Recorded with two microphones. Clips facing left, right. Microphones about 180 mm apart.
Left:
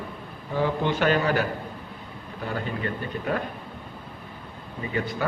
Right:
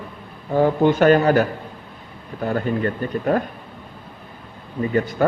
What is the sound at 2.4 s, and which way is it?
Speech, 45° right (ahead or behind).